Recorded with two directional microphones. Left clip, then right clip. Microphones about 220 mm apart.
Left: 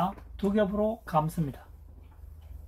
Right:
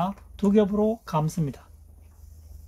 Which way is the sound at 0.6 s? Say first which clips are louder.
Right 5 dB; 55° right (ahead or behind).